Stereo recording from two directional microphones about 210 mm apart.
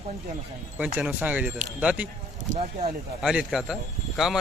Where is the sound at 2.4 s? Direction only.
35° right (ahead or behind).